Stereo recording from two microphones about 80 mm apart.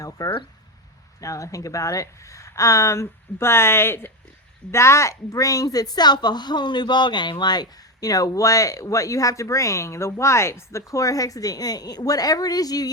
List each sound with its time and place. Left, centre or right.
0.2 s speech: left